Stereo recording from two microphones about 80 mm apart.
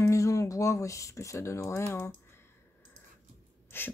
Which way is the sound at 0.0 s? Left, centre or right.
Left.